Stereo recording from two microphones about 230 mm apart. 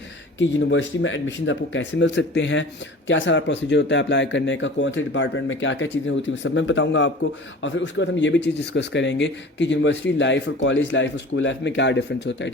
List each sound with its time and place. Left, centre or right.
0.3 s a man's voice: left